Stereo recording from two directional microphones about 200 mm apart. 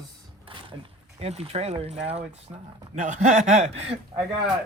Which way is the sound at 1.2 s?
30° right (ahead or behind).